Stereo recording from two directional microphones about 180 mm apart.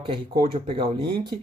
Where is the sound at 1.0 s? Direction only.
60° right (ahead or behind).